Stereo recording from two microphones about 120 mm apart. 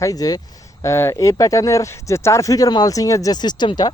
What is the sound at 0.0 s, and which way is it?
Speech, 30° left (ahead or behind).